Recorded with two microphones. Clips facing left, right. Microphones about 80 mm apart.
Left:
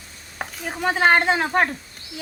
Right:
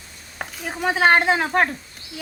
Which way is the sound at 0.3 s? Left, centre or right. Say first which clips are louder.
Even; centre.